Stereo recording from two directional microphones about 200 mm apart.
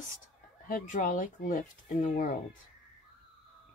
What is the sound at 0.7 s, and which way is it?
Speech, 40° left (ahead or behind).